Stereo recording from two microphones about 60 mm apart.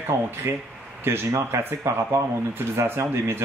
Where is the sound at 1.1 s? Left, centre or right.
Right.